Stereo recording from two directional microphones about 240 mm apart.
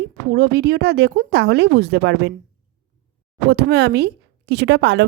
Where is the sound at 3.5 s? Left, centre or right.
Right.